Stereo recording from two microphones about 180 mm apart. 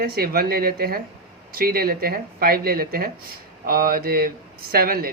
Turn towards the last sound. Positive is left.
turn(degrees=-55)  # may be behind; listen again after turning